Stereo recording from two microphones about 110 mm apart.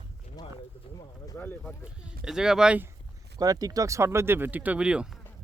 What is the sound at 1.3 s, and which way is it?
Speech, 15° left (ahead or behind).